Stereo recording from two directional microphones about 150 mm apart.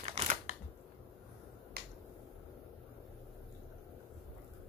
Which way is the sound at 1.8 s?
90° right.